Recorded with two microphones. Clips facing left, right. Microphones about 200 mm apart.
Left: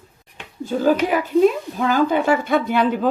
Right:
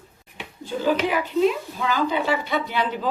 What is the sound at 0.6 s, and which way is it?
Speech, 45° left (ahead or behind).